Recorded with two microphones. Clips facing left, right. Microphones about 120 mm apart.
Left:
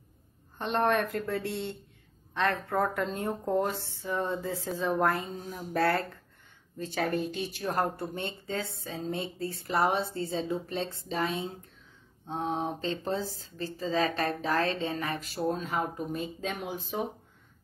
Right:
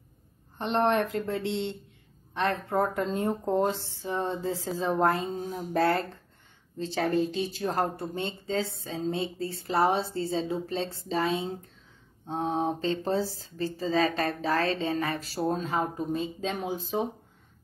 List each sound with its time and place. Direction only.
0.6 s a woman's voice: 20° right (ahead or behind); by 15.8 s 45° right (ahead or behind)
15.8 s a woman's voice: 25° right (ahead or behind)